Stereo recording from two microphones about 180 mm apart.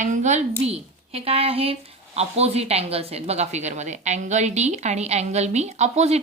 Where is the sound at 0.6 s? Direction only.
35° right (ahead or behind).